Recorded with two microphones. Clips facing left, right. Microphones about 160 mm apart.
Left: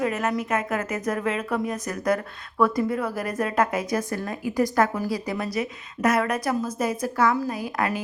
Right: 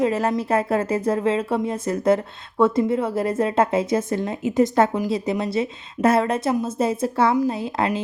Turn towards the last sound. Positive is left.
turn(degrees=-25)  # may be behind; listen again after turning